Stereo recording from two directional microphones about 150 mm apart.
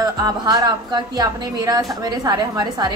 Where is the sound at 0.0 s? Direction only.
25° right (ahead or behind).